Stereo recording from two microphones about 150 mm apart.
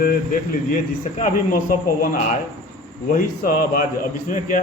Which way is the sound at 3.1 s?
65° left (ahead or behind).